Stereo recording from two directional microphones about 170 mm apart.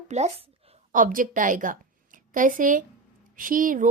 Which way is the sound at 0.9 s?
50° right (ahead or behind).